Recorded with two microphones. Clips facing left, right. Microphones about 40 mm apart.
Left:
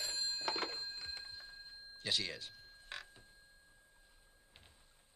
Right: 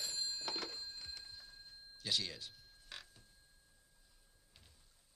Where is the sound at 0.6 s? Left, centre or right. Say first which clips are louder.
Left 4 dB; left.